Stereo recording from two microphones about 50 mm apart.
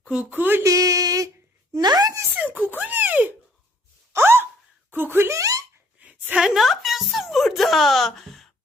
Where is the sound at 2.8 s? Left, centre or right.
Right.